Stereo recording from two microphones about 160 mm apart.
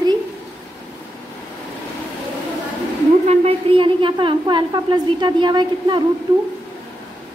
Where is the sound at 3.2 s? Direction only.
35° right (ahead or behind).